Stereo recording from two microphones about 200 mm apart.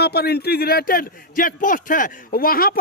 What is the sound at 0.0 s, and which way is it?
A man's voice, 50° left (ahead or behind).